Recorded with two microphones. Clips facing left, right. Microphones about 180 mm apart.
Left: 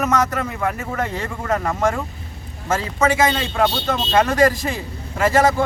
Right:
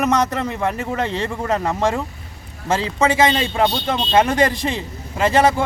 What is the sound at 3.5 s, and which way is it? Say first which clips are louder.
A man's voice: right 1 dB; 20° right (ahead or behind).